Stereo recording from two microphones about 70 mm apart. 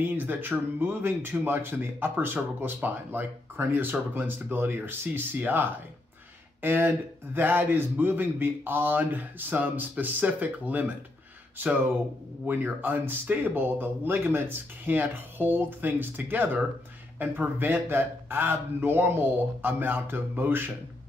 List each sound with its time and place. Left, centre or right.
0.0 s speech: right